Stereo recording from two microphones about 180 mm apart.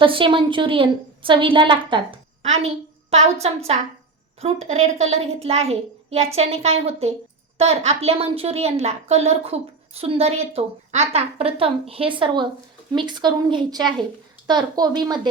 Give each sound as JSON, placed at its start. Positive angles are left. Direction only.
{"t": 0.0, "sound": "a woman's voice", "side_deg": -30}
{"t": 2.4, "sound": "a sound", "side_deg": -35}
{"t": 3.4, "sound": "a woman's voice", "side_deg": -35}